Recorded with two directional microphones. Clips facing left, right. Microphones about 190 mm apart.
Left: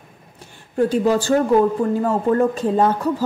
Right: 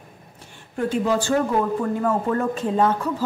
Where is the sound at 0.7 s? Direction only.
35° left (ahead or behind).